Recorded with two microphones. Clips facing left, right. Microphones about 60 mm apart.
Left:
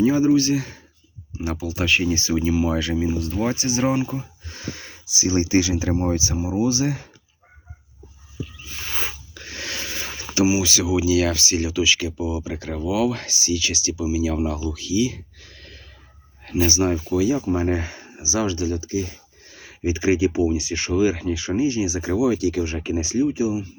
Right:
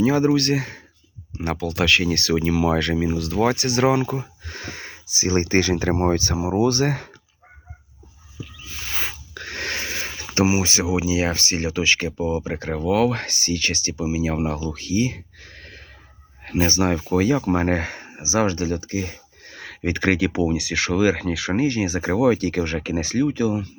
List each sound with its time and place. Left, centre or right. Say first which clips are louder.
0.0 s speech: left 1 dB; right
9.3 s speech: right 4 dB; right
18.0 s speech: right 3 dB; right